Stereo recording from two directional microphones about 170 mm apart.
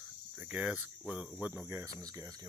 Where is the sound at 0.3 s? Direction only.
5° right (ahead or behind).